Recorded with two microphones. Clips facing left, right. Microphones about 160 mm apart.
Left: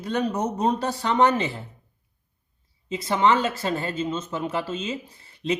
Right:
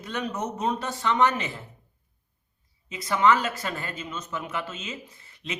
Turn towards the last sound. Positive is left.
turn(degrees=35)  # may be behind; listen again after turning